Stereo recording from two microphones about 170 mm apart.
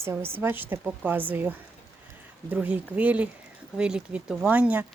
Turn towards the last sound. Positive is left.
turn(degrees=-10)  # may be behind; listen again after turning